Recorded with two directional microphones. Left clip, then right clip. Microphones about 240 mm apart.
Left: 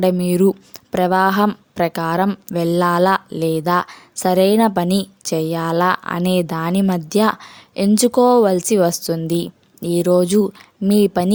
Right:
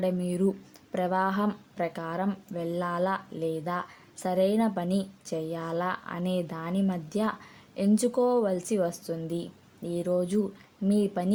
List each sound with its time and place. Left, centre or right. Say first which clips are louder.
0.0 s a woman's voice: left 13 dB; left